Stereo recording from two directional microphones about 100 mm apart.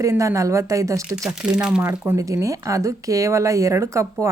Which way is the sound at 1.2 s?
10° right (ahead or behind).